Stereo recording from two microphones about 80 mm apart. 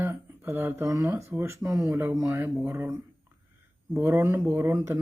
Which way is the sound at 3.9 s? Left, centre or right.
Right.